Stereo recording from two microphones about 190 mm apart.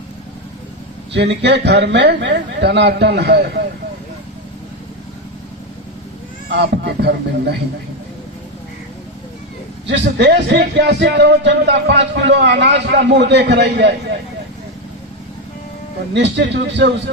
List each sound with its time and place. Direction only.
1.1 s speech: 65° right (ahead or behind)
6.5 s speech: 65° right (ahead or behind)
10.2 s speech: 65° right (ahead or behind)
16.1 s speech: 65° right (ahead or behind)